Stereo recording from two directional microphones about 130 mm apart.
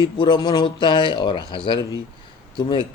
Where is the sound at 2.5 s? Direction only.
35° left (ahead or behind).